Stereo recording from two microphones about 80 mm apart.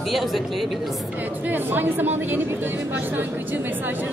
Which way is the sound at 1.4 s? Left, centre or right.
Right.